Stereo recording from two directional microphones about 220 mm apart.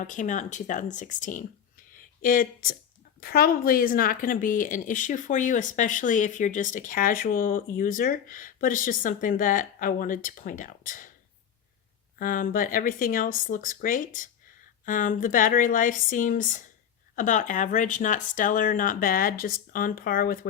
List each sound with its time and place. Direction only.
0.0 s speech: 35° left (ahead or behind)
12.2 s speech: 40° left (ahead or behind)